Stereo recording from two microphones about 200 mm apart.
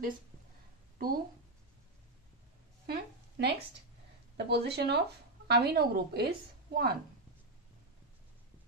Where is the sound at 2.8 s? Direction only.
60° right (ahead or behind).